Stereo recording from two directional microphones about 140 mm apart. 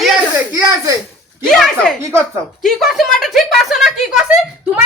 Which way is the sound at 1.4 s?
5° left (ahead or behind).